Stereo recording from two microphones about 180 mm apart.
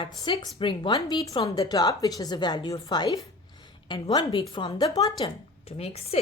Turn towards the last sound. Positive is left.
turn(degrees=35)  # may be behind; listen again after turning